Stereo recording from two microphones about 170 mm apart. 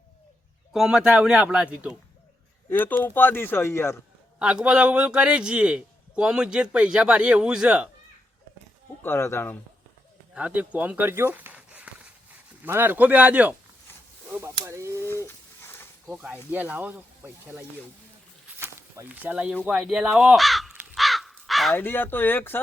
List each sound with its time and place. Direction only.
0.7 s a man's voice: 5° right (ahead or behind)
2.6 s speech: 10° left (ahead or behind)
4.4 s a man's voice: 5° right (ahead or behind)
9.0 s speech: 15° left (ahead or behind)
10.3 s speech: 10° right (ahead or behind)
15.6 s snake: 15° left (ahead or behind)
16.0 s speech: 5° right (ahead or behind)
18.6 s a sound: 10° right (ahead or behind)
19.6 s crow: 5° right (ahead or behind)
21.8 s speech: 10° left (ahead or behind)